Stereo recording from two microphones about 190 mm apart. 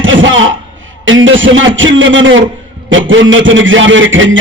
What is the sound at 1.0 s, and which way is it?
A man's voice, 90° right.